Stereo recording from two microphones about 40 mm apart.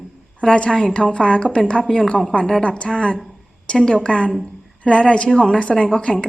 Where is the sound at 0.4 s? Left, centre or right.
Left.